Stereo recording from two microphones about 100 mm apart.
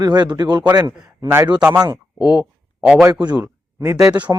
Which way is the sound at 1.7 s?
40° right (ahead or behind).